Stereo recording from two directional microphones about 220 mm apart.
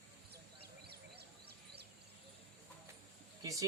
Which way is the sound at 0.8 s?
45° right (ahead or behind).